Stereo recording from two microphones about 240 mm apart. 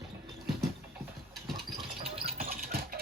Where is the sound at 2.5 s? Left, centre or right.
Right.